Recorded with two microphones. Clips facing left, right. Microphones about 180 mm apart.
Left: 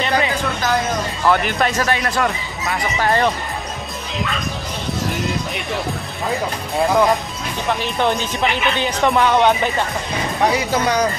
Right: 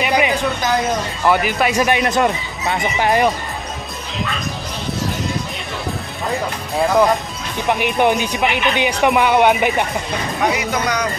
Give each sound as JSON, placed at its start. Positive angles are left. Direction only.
{"t": 0.0, "sound": "a sound", "side_deg": -15}
{"t": 1.3, "sound": "speech", "side_deg": -5}
{"t": 6.7, "sound": "speech", "side_deg": 0}
{"t": 7.8, "sound": "speech", "side_deg": -15}
{"t": 10.4, "sound": "speech", "side_deg": 30}